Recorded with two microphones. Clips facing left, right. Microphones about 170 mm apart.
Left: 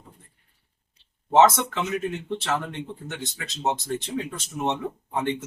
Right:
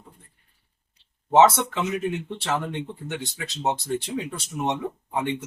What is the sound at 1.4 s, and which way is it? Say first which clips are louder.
Speech: right 1 dB; 10° right (ahead or behind).